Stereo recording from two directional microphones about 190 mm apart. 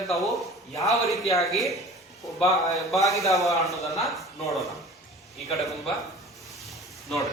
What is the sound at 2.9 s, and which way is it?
A man's voice, centre (ahead or behind).